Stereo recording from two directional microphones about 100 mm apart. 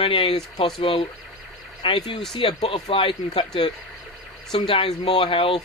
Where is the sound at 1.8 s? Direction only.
55° left (ahead or behind).